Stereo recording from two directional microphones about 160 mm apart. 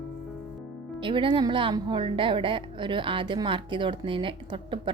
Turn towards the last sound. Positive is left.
turn(degrees=-30)  # may be behind; listen again after turning